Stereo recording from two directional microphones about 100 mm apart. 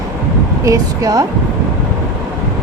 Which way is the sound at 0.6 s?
35° right (ahead or behind).